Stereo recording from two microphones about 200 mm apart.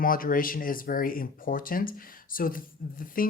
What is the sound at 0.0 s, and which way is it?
Speech, 45° left (ahead or behind).